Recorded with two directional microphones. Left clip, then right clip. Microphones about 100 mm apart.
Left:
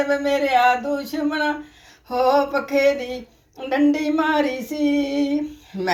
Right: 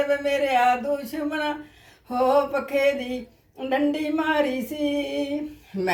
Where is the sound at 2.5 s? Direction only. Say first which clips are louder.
Left 4 dB; 30° right (ahead or behind).